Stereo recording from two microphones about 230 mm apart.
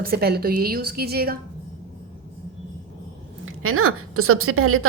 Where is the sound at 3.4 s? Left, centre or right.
Right.